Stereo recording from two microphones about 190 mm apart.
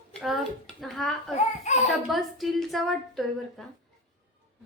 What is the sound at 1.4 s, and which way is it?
Speech, 35° left (ahead or behind).